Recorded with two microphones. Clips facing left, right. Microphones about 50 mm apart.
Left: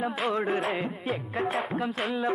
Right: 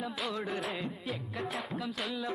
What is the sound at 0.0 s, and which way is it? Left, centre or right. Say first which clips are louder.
Music: left 8 dB; left.